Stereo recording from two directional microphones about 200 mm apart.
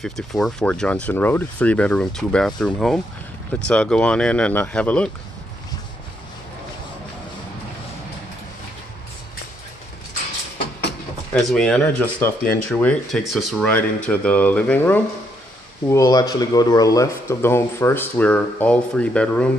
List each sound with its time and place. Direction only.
0.0 s speech: centre (ahead or behind)
10.9 s speech: 5° left (ahead or behind)